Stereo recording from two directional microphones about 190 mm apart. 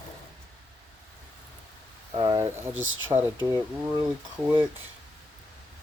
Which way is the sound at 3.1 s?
10° right (ahead or behind).